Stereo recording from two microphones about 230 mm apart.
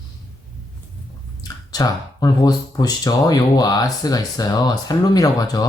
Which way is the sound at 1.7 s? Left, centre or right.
Centre.